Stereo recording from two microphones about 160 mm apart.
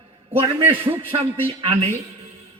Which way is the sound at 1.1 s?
35° right (ahead or behind).